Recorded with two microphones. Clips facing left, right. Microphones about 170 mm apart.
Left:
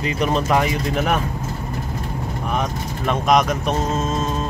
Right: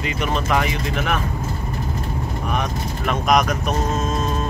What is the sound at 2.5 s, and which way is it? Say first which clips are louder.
Speech: left 1 dB; 25° left (ahead or behind).